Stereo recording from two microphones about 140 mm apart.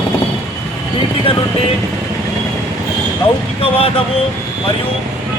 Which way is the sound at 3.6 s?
45° left (ahead or behind).